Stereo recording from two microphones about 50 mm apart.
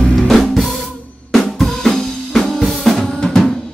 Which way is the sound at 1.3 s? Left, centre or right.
Centre.